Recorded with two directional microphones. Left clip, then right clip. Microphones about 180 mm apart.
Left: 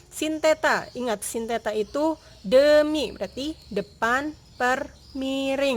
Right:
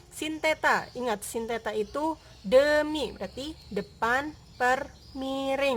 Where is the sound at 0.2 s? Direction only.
25° left (ahead or behind).